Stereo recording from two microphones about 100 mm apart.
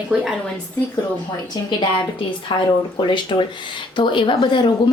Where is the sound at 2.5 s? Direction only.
55° left (ahead or behind).